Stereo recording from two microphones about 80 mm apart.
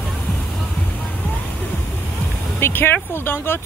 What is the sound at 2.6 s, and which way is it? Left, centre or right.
Speech, left.